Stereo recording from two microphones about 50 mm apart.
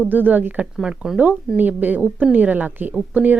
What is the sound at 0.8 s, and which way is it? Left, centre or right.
Speech, centre.